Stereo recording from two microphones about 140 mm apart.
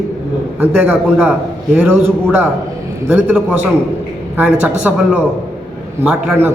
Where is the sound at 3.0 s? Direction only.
10° right (ahead or behind).